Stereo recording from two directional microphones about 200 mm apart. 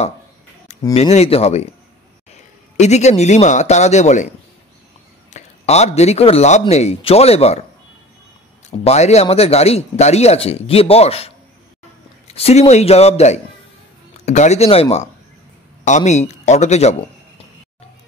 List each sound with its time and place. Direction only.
0.9 s speech: 30° left (ahead or behind)
2.8 s speech: 35° left (ahead or behind)
5.3 s speech: 35° left (ahead or behind)
8.6 s speech: 35° left (ahead or behind)